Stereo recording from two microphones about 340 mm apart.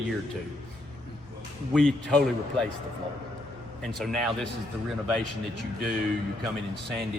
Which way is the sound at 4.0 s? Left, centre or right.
Centre.